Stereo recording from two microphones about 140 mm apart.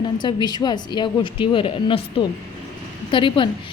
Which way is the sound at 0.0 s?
30° left (ahead or behind).